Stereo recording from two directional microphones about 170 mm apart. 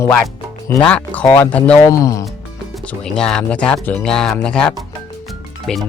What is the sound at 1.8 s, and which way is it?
Speech, 20° left (ahead or behind).